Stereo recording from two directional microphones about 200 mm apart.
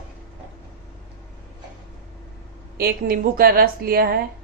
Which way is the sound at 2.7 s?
50° right (ahead or behind).